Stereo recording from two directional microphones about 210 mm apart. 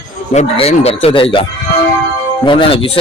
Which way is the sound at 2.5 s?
25° left (ahead or behind).